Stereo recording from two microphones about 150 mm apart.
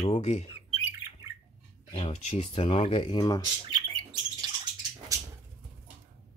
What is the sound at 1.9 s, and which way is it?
Speech, 40° left (ahead or behind).